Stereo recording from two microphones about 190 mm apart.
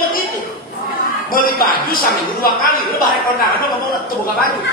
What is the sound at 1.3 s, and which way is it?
A man's voice, 50° left (ahead or behind).